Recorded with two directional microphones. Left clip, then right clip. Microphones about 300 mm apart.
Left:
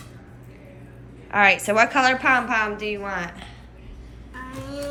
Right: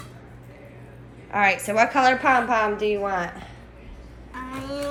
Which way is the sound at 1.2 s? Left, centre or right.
Centre.